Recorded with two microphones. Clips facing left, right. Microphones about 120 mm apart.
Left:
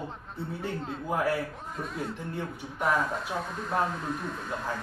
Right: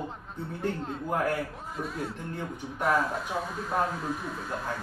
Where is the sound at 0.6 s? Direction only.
5° left (ahead or behind).